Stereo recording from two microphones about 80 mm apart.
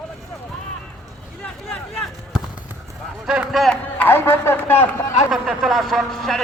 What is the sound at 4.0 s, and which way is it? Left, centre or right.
A man's voice, left.